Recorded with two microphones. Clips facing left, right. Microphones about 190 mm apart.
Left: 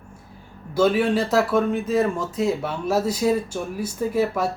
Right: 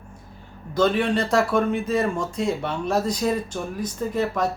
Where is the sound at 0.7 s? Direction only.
5° left (ahead or behind).